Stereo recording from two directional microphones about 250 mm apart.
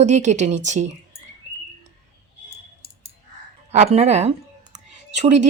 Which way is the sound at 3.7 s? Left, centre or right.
Right.